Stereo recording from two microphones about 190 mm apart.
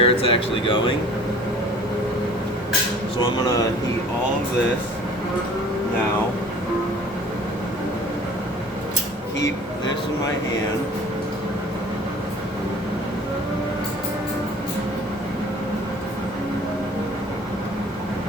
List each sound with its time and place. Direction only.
0.0 s speech: 30° left (ahead or behind)
3.2 s speech: 20° left (ahead or behind)